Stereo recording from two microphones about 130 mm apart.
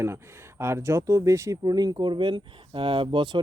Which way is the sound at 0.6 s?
20° right (ahead or behind).